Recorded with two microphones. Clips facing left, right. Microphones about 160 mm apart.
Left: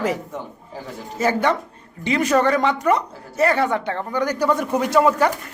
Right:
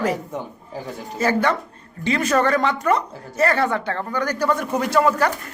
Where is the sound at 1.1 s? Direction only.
20° left (ahead or behind).